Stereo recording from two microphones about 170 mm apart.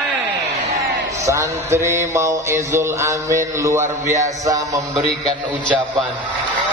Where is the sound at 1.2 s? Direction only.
15° right (ahead or behind).